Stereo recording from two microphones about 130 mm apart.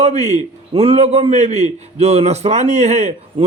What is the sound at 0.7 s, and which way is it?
A man's voice, 50° right (ahead or behind).